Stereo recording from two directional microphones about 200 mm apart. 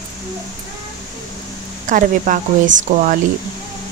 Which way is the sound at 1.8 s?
40° right (ahead or behind).